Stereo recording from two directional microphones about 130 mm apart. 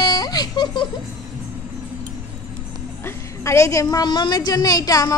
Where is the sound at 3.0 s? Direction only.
20° left (ahead or behind).